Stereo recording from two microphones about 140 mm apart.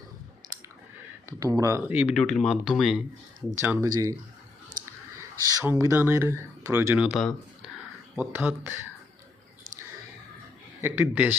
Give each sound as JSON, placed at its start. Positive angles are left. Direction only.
{"t": 1.3, "sound": "speech", "side_deg": -25}
{"t": 2.1, "sound": "speech", "side_deg": 5}
{"t": 3.5, "sound": "speech", "side_deg": -20}
{"t": 5.5, "sound": "speech", "side_deg": -25}
{"t": 7.0, "sound": "speech", "side_deg": 0}
{"t": 8.1, "sound": "speech", "side_deg": -15}
{"t": 10.8, "sound": "a man's voice", "side_deg": -15}